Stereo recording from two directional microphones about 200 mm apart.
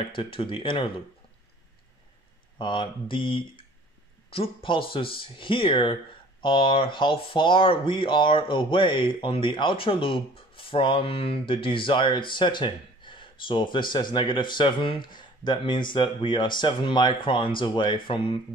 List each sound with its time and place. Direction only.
0.1 s speech: 25° left (ahead or behind)
2.6 s speech: 25° left (ahead or behind)